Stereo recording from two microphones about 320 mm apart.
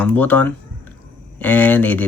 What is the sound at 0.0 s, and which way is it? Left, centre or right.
Speech, centre.